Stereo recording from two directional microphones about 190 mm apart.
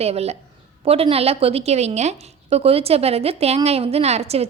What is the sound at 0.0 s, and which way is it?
A woman's voice, 35° right (ahead or behind).